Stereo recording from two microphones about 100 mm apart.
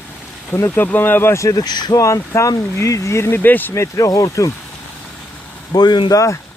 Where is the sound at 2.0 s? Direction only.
30° left (ahead or behind).